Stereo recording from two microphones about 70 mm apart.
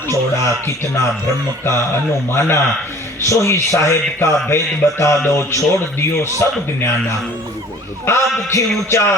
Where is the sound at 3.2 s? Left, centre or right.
Left.